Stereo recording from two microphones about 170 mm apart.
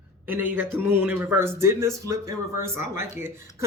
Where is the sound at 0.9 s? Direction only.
10° right (ahead or behind).